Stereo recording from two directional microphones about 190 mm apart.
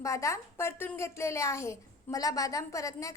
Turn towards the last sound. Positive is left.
turn(degrees=15)  # may be behind; listen again after turning